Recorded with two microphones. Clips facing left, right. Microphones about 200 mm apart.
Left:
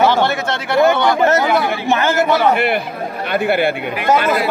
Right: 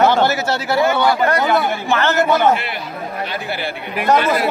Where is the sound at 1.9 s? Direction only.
10° left (ahead or behind).